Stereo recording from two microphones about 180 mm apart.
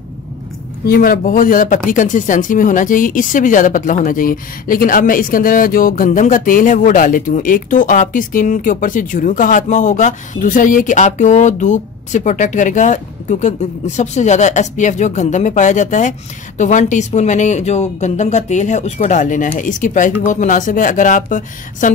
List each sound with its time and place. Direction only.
0.8 s speech: 50° left (ahead or behind)